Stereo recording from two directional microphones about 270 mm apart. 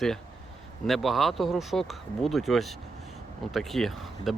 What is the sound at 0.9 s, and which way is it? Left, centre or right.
Speech, centre.